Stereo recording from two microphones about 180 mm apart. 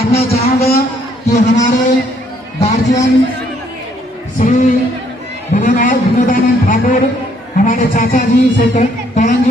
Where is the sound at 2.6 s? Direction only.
40° left (ahead or behind).